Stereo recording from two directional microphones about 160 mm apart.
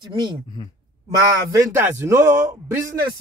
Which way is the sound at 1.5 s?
15° right (ahead or behind).